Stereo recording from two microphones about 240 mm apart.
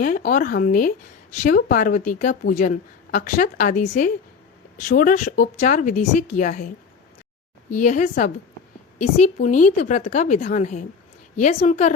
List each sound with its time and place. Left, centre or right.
0.0 s a woman's voice: left
7.7 s a woman's voice: left